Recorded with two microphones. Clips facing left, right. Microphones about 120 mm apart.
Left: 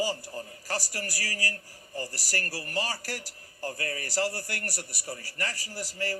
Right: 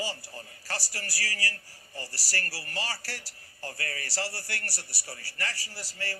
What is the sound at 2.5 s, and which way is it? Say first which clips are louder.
A man's voice: left 4 dB; 45° left (ahead or behind).